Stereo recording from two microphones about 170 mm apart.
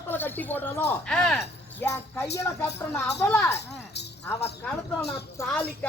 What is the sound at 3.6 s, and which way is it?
Speech, 85° left.